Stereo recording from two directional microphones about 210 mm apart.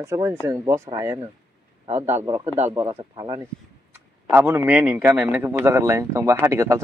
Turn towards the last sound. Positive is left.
turn(degrees=-15)  # may be behind; listen again after turning